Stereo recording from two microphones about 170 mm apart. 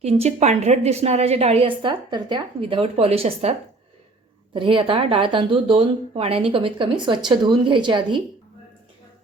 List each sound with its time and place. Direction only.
0.0 s a woman's voice: 40° right (ahead or behind)
4.5 s speech: 30° right (ahead or behind)